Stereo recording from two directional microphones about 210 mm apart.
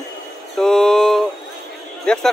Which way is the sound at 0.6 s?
Centre (ahead or behind).